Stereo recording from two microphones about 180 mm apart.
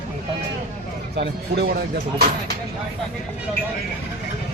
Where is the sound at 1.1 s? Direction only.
65° right (ahead or behind).